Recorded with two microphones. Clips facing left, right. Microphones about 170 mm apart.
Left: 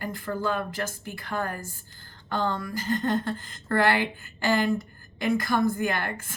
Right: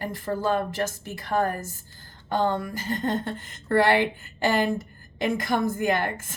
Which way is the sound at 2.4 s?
25° right (ahead or behind).